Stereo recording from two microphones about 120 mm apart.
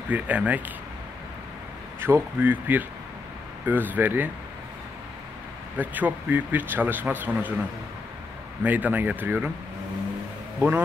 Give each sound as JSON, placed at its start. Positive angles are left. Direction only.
{"t": 0.1, "sound": "speech", "side_deg": -10}
{"t": 2.0, "sound": "speech", "side_deg": -20}
{"t": 5.8, "sound": "speech", "side_deg": -15}
{"t": 8.6, "sound": "speech", "side_deg": -15}